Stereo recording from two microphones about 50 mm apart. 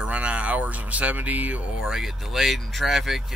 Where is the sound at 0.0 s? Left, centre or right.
Right.